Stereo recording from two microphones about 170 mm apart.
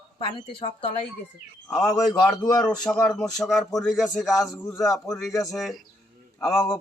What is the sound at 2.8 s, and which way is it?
Speech, 5° left (ahead or behind).